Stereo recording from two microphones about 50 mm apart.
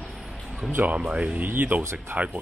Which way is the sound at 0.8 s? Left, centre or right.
Right.